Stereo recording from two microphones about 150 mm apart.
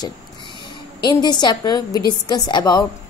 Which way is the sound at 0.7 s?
30° left (ahead or behind).